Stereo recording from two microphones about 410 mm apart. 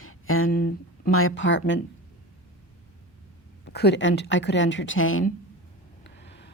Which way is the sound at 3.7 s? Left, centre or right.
Left.